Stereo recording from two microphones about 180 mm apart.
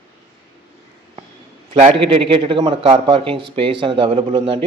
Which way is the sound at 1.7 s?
35° right (ahead or behind).